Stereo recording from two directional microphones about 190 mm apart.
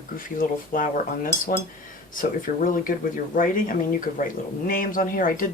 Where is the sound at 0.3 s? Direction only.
45° left (ahead or behind).